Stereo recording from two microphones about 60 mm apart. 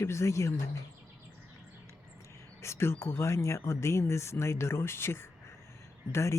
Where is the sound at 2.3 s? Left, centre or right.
Left.